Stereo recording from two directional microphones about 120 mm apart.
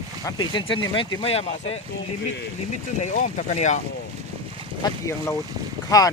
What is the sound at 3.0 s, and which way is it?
Speech, 90° left.